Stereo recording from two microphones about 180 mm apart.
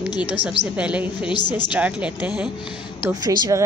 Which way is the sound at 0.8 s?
5° right (ahead or behind).